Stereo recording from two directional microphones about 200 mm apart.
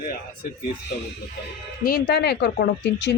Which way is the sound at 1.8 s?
50° left (ahead or behind).